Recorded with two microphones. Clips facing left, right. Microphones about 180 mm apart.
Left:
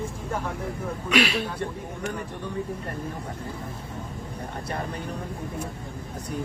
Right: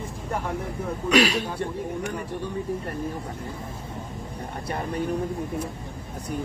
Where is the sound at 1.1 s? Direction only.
40° right (ahead or behind).